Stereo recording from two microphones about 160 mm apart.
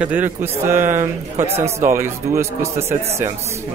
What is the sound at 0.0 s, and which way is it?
Speech, 10° right (ahead or behind).